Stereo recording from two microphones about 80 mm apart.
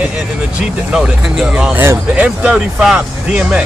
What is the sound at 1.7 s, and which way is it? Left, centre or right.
Speech, right.